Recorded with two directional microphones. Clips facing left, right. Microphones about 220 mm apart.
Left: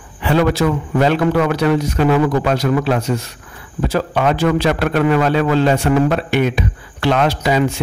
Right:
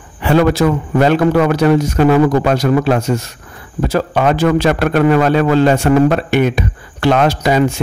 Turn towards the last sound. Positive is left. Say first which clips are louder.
# right 3 dB
turn(degrees=-45)  # may be behind; listen again after turning